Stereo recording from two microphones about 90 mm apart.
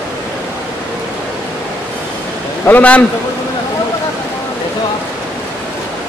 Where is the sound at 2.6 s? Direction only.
15° left (ahead or behind).